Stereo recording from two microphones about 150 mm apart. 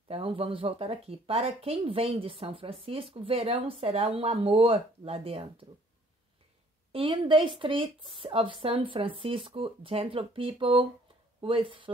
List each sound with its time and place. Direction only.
0.1 s speech: 40° right (ahead or behind)
6.9 s speech: 35° right (ahead or behind)